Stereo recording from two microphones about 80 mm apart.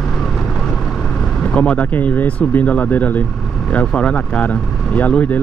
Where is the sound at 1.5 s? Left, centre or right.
Centre.